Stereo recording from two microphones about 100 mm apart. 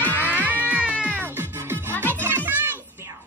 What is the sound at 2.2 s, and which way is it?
Music, 20° right (ahead or behind).